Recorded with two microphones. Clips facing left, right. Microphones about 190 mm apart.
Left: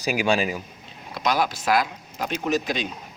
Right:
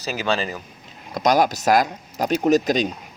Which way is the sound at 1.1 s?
45° right (ahead or behind).